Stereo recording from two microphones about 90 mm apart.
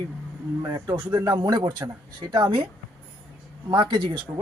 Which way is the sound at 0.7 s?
55° right (ahead or behind).